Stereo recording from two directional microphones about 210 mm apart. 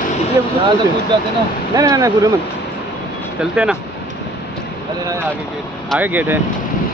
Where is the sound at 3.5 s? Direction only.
5° right (ahead or behind).